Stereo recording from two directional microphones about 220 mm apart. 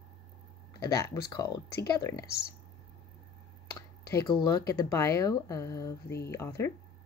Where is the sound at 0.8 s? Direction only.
15° left (ahead or behind).